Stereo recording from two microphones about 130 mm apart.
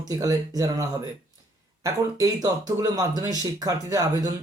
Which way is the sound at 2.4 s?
30° right (ahead or behind).